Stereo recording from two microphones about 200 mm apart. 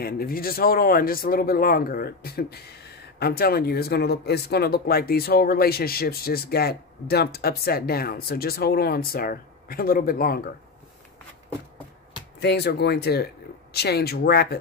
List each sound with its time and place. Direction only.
0.0 s speech: 50° left (ahead or behind)
12.4 s speech: 55° left (ahead or behind)